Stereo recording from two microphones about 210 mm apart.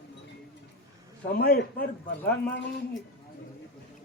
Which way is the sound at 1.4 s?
50° left (ahead or behind).